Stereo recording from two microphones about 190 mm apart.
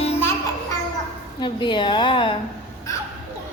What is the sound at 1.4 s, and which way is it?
Speech, 25° left (ahead or behind).